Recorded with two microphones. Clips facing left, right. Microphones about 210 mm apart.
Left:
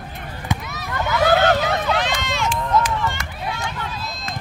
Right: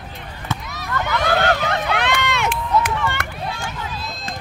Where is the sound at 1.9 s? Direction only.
65° right (ahead or behind).